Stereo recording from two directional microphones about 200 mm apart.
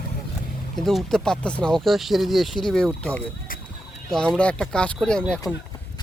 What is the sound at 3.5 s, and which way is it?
Fowl, 45° left (ahead or behind).